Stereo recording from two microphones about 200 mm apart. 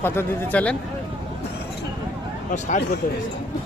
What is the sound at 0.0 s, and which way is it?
Speech, 10° left (ahead or behind).